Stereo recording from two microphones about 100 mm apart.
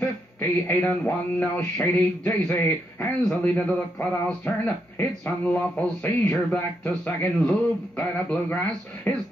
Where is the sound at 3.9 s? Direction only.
20° left (ahead or behind).